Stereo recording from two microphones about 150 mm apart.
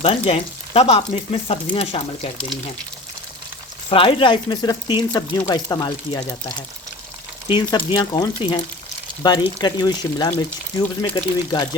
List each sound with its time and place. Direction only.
0.0 s frying: 40° left (ahead or behind)
3.8 s frying: 35° left (ahead or behind)
5.5 s speech: 25° left (ahead or behind)
7.4 s frying: 35° left (ahead or behind)
9.2 s speech: 30° left (ahead or behind)